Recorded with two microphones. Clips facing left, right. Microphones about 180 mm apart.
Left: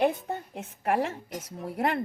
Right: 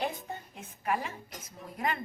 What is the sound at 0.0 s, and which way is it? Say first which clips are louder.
A woman's voice: left 9 dB; 70° left (ahead or behind).